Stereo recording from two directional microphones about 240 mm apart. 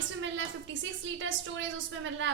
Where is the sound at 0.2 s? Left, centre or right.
Right.